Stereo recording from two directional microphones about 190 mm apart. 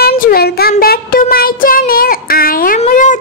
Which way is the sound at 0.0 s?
55° left (ahead or behind).